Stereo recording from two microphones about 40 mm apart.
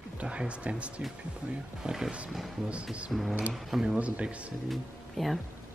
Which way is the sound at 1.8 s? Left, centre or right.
Centre.